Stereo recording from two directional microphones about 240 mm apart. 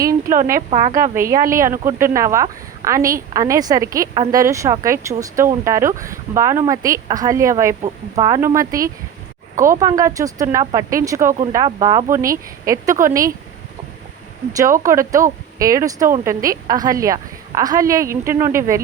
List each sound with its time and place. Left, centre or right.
0.5 s speech: right
1.1 s a woman's voice: centre
14.8 s a woman's voice: centre